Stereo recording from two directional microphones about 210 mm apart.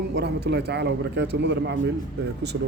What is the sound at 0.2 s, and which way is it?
A man's voice, 50° right (ahead or behind).